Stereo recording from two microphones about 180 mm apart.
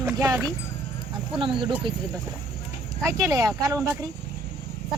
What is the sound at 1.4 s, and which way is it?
Speech, 25° right (ahead or behind).